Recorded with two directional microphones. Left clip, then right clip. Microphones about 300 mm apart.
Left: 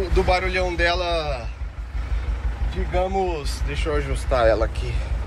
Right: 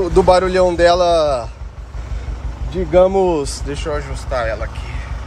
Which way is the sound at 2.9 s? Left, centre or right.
Right.